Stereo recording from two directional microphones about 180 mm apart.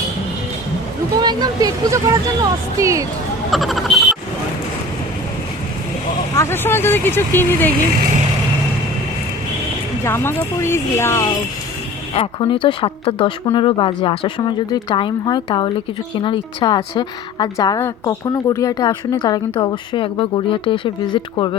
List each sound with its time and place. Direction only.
1.2 s speech: 25° right (ahead or behind)
3.5 s frog: centre (ahead or behind)
6.3 s speech: 15° left (ahead or behind)
10.0 s speech: 15° left (ahead or behind)
12.1 s a woman's voice: 30° left (ahead or behind)